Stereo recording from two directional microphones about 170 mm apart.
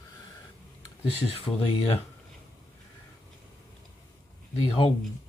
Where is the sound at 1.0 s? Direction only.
35° left (ahead or behind).